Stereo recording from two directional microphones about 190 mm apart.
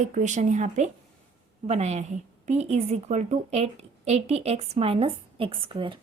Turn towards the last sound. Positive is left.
turn(degrees=-25)  # may be behind; listen again after turning